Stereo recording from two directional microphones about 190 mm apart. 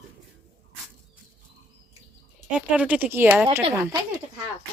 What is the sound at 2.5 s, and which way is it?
Speech, 5° right (ahead or behind).